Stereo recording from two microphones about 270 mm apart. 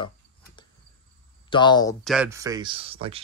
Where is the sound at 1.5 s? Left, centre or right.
Centre.